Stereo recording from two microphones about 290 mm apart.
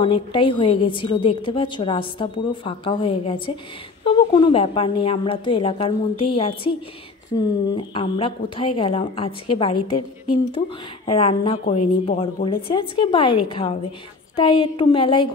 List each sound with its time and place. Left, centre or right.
0.0 s a woman's voice: centre
11.1 s a woman's voice: centre